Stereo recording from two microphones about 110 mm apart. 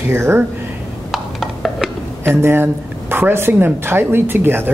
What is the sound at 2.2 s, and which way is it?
Speech, 20° right (ahead or behind).